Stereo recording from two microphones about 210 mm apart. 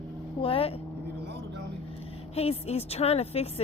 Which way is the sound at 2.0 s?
30° left (ahead or behind).